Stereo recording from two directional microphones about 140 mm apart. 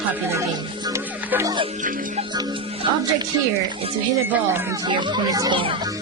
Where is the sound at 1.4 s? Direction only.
30° right (ahead or behind).